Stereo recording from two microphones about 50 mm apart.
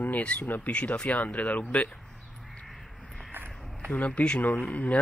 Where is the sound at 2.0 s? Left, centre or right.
Centre.